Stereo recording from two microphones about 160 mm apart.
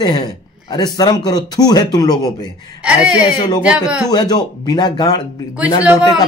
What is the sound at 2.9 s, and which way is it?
Speech, 5° right (ahead or behind).